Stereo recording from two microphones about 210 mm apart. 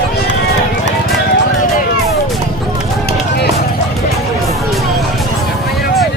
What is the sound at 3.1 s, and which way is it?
Run, 50° left (ahead or behind).